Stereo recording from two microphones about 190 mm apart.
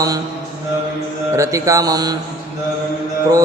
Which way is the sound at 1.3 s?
15° right (ahead or behind).